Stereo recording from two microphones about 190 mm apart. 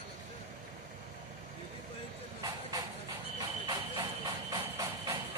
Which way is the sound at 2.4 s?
20° right (ahead or behind).